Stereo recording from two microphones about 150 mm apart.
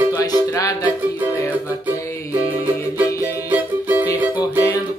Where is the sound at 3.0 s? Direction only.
20° left (ahead or behind).